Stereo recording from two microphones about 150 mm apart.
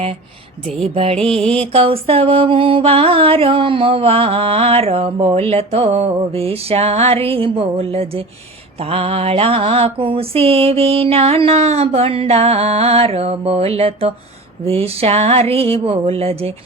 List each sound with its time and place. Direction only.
0.8 s mantra: 40° right (ahead or behind)